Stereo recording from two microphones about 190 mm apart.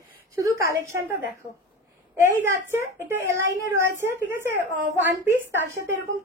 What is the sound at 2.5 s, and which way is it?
A woman's voice, 15° right (ahead or behind).